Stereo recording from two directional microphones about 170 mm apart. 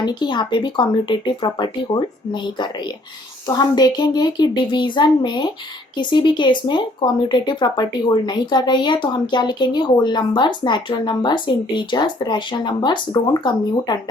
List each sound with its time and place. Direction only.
0.0 s speech: 25° left (ahead or behind)